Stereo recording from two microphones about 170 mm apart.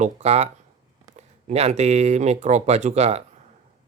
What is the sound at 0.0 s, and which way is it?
Speech, 40° right (ahead or behind).